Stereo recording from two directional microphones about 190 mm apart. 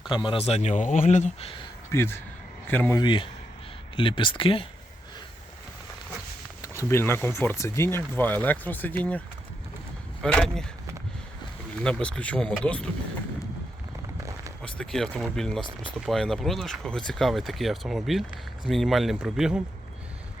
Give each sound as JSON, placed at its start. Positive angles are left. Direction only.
{"t": 0.1, "sound": "speech", "side_deg": 25}
{"t": 1.9, "sound": "speech", "side_deg": 15}
{"t": 3.0, "sound": "speech", "side_deg": 25}
{"t": 6.6, "sound": "speech", "side_deg": 15}
{"t": 10.2, "sound": "speech", "side_deg": 5}
{"t": 11.8, "sound": "speech", "side_deg": 5}
{"t": 14.6, "sound": "speech", "side_deg": 5}